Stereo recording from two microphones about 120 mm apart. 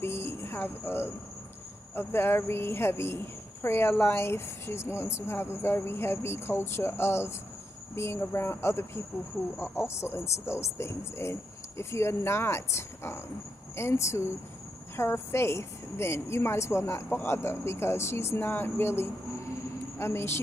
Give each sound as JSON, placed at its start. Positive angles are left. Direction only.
{"t": 0.0, "sound": "music", "side_deg": 20}
{"t": 2.0, "sound": "speech", "side_deg": 20}